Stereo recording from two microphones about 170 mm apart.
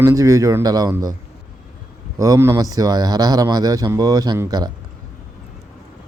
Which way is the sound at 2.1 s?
20° right (ahead or behind).